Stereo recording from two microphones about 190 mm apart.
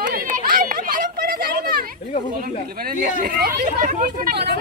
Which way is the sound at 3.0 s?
45° right (ahead or behind).